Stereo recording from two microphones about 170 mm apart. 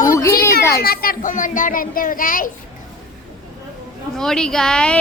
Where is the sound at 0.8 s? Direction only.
60° left (ahead or behind).